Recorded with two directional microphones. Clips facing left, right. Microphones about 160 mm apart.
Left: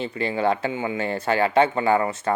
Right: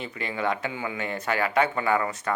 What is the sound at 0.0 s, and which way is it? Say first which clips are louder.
Speech: left 6 dB; 30° left (ahead or behind).